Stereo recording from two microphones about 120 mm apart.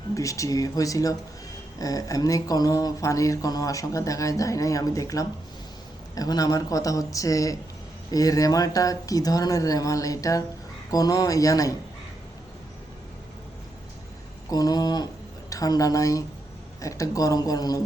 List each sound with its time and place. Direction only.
0.1 s speech: 25° left (ahead or behind)
14.5 s speech: 35° left (ahead or behind)